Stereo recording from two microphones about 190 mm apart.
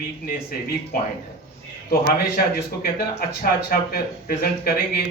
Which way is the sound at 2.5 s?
55° left (ahead or behind).